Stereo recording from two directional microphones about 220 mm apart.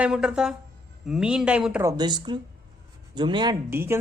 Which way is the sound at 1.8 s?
20° right (ahead or behind).